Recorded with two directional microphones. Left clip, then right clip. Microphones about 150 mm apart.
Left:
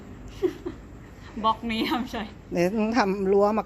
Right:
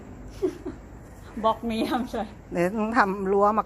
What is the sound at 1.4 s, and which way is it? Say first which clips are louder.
Speech: even; 45° left (ahead or behind).